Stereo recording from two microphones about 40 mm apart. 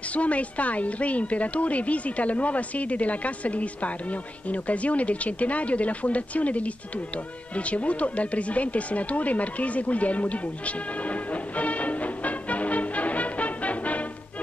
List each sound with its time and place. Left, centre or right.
0.1 s speech: left
7.5 s music: left